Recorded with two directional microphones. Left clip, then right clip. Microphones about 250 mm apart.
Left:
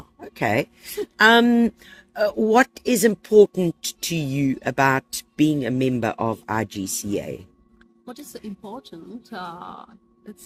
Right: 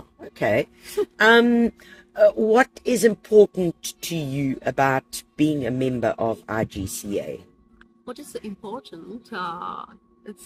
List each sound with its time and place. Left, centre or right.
0.2 s a sound: left
1.1 s speech: left
8.0 s speech: centre